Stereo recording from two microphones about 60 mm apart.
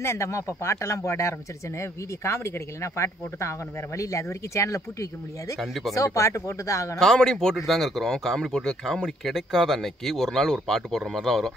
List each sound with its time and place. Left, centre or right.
0.0 s speech: left
5.6 s speech: centre
5.9 s speech: left
7.0 s speech: centre